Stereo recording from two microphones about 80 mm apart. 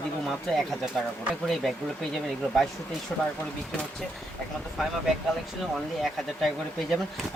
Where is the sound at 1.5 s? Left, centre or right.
Centre.